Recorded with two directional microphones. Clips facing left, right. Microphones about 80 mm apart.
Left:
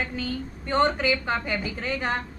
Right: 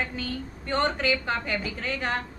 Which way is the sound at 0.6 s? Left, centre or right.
Centre.